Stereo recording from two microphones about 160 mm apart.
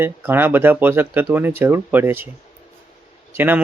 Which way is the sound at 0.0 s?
15° right (ahead or behind).